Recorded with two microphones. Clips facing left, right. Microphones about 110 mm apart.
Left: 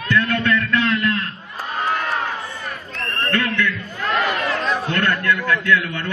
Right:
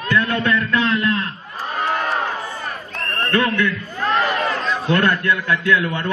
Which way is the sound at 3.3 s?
25° right (ahead or behind).